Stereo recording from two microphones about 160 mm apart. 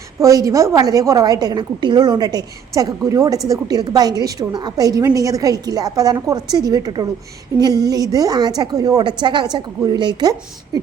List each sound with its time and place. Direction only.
0.2 s a woman's voice: 20° right (ahead or behind)